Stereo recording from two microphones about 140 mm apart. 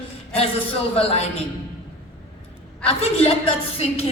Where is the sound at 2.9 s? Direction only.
45° left (ahead or behind).